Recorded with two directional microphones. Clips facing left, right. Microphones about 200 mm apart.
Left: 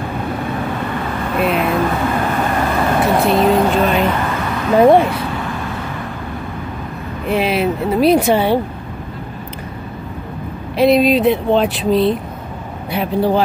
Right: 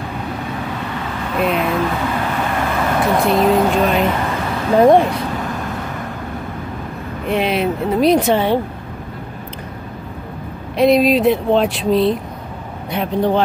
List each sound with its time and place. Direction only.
0.4 s vehicle: 50° left (ahead or behind); by 3.2 s 30° left (ahead or behind)
3.3 s speech: centre (ahead or behind)
4.1 s a sound: 30° right (ahead or behind)
4.7 s speech: 5° left (ahead or behind)
5.0 s vehicle: 40° right (ahead or behind)
7.2 s speech: 5° left (ahead or behind)
10.8 s speech: centre (ahead or behind)